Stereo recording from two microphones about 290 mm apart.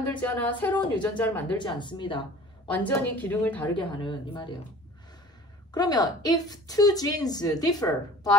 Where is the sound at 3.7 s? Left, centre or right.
Centre.